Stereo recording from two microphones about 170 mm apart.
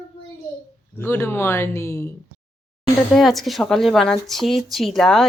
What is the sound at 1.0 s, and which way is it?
Speech, 15° left (ahead or behind).